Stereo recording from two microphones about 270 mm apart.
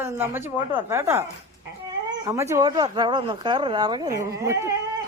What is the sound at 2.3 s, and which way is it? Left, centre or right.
Speech, centre.